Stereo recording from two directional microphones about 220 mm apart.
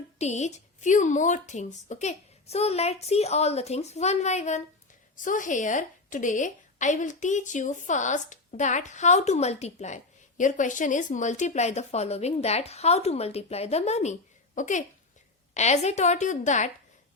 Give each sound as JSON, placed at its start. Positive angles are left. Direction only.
{"t": 0.2, "sound": "a woman's voice", "side_deg": 30}